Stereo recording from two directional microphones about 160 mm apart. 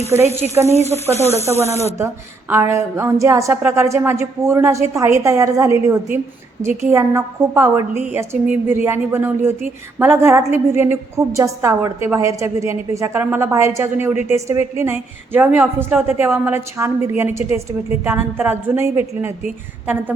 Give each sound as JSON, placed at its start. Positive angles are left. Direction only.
{"t": 0.5, "sound": "a woman's voice", "side_deg": -15}
{"t": 1.1, "sound": "speech", "side_deg": -40}
{"t": 1.5, "sound": "a woman's voice", "side_deg": -15}